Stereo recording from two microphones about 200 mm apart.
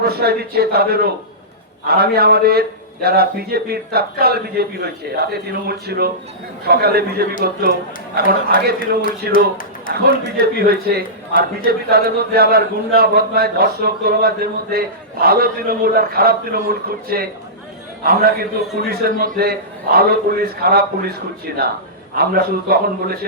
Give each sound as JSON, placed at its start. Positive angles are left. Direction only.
{"t": 0.0, "sound": "a man's voice", "side_deg": -50}
{"t": 22.2, "sound": "a man's voice", "side_deg": -50}